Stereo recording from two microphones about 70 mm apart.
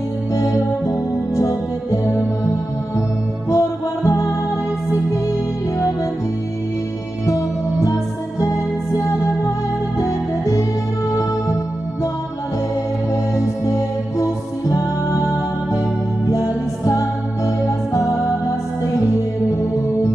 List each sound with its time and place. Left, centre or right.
0.3 s music: left
7.2 s music: left
13.1 s music: left